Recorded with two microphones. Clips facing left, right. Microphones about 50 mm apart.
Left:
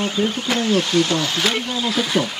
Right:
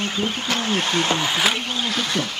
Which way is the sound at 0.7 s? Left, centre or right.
Right.